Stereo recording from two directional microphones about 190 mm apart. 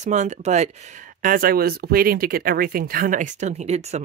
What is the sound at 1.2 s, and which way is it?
Speech, 50° right (ahead or behind).